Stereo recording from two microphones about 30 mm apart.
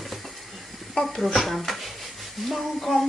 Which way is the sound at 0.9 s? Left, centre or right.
Centre.